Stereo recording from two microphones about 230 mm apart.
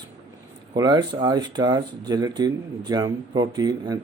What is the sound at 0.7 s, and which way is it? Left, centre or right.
Speech, centre.